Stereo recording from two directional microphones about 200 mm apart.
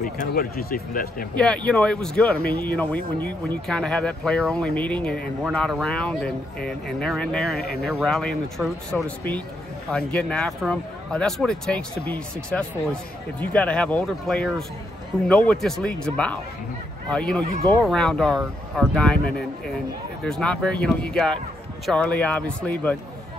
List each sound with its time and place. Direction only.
0.0 s speech: 50° left (ahead or behind)
1.3 s speech: 5° left (ahead or behind)